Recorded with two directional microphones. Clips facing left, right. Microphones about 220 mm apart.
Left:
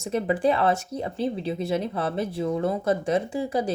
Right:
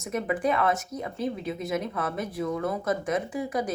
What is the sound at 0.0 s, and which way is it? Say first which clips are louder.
Speech: left 4 dB; 30° left (ahead or behind).